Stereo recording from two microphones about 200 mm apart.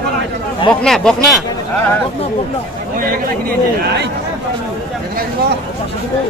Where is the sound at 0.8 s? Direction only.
Centre (ahead or behind).